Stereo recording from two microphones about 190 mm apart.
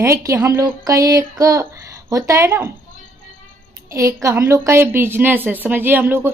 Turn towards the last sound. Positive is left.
turn(degrees=-10)  # may be behind; listen again after turning